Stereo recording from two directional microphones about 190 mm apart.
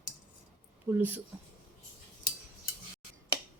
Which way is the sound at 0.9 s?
10° right (ahead or behind).